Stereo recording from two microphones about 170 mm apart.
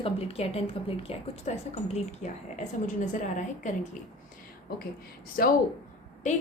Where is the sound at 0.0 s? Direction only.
35° left (ahead or behind).